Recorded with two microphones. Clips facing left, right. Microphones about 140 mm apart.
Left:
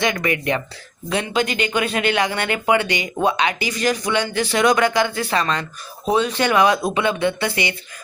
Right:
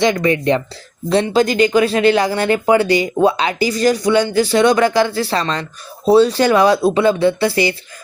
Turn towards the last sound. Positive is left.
turn(degrees=-35)  # may be behind; listen again after turning